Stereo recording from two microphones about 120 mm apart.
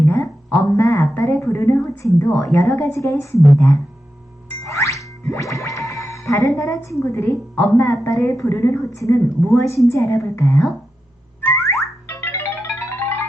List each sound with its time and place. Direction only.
0.0 s a sound: 25° left (ahead or behind)
2.1 s a woman's voice: 25° left (ahead or behind)
4.6 s music: 25° left (ahead or behind)
6.6 s a woman's voice: 25° left (ahead or behind)
11.4 s car alarm: 25° left (ahead or behind)
12.0 s music: 25° left (ahead or behind)